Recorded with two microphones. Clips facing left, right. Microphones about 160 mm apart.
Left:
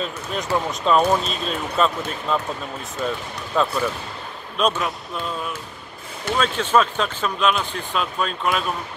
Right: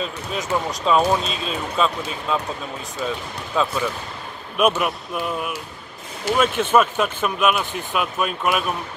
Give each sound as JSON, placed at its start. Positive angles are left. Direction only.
{"t": 0.0, "sound": "speech", "side_deg": 0}